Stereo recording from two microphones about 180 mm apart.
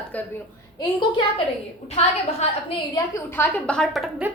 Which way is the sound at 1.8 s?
35° left (ahead or behind).